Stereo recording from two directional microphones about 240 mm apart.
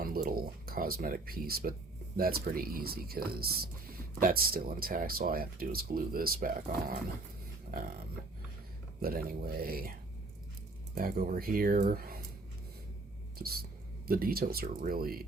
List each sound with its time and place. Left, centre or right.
0.0 s a sound: right
2.1 s speech: right
7.7 s a sound: right
9.0 s speech: right
10.9 s speech: right
13.4 s speech: right